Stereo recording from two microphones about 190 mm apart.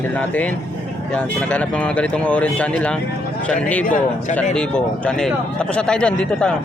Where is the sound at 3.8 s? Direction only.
45° left (ahead or behind).